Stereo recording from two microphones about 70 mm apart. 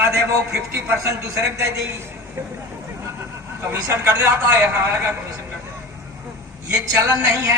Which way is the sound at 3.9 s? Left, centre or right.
Right.